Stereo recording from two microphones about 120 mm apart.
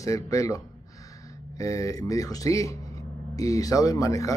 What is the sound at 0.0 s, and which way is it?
Speech, 25° left (ahead or behind).